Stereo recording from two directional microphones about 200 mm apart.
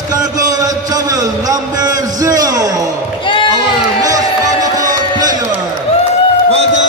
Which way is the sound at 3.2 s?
25° left (ahead or behind).